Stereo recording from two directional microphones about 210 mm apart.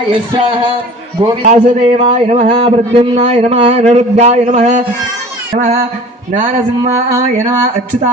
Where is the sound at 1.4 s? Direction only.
30° right (ahead or behind).